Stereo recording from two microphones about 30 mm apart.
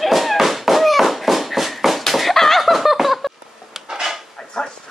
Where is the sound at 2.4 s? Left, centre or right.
Centre.